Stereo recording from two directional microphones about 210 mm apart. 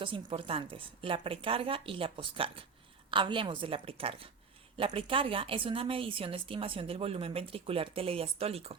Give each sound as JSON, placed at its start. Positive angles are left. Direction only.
{"t": 0.0, "sound": "a woman's voice", "side_deg": -25}